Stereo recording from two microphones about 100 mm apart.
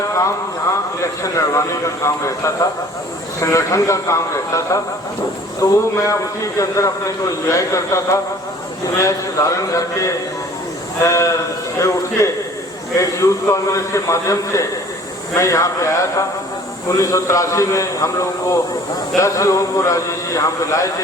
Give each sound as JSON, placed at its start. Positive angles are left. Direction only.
{"t": 1.2, "sound": "a man's voice", "side_deg": 30}